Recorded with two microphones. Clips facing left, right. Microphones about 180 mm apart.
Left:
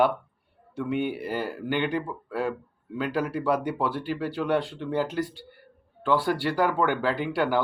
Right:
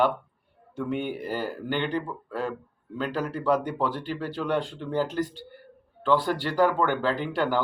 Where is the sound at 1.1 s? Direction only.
40° right (ahead or behind).